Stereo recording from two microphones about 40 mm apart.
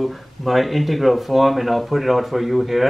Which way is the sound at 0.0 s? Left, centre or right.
Centre.